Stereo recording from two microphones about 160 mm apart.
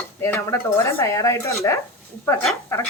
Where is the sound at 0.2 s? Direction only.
15° left (ahead or behind).